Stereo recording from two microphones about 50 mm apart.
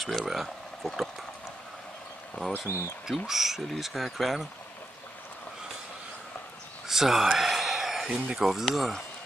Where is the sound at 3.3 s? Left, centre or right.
Centre.